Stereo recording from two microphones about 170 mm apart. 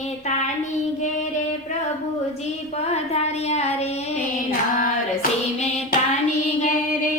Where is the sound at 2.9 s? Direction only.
40° left (ahead or behind).